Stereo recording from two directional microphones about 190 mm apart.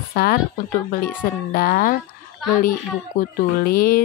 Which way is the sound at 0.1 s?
50° left (ahead or behind).